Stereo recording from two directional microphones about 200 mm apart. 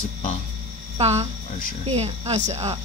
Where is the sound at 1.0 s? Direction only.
30° right (ahead or behind).